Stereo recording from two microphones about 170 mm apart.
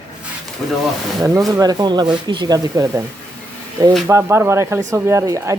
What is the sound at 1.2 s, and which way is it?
Speech, 20° right (ahead or behind).